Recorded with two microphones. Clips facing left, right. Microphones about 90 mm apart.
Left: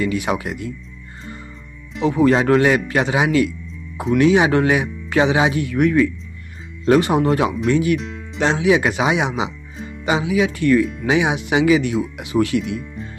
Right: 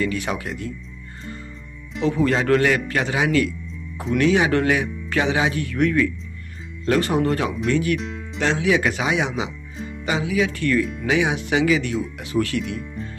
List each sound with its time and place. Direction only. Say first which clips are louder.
0.0 s speech: left 4 dB; 15° left (ahead or behind)
2.0 s speech: left 4 dB; 15° left (ahead or behind)
9.8 s music: right 1 dB; centre (ahead or behind)
10.0 s speech: left 4 dB; 20° left (ahead or behind)